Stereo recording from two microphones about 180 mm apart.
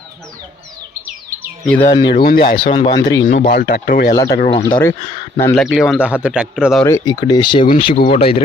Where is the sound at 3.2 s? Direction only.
60° left (ahead or behind).